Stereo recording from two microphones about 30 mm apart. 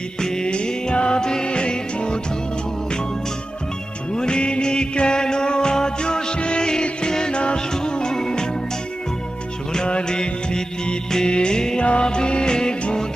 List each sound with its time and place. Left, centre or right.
0.2 s music: centre
0.4 s music: left
4.1 s music: left
9.7 s music: left
11.8 s music: left